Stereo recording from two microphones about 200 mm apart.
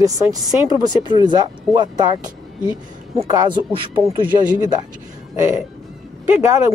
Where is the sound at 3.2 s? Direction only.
15° right (ahead or behind).